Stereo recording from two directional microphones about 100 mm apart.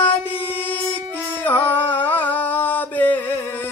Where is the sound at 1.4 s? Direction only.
20° left (ahead or behind).